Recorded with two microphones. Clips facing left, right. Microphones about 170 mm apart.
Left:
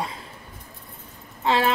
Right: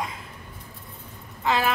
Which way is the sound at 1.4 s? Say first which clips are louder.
Left 2 dB; 30° left (ahead or behind).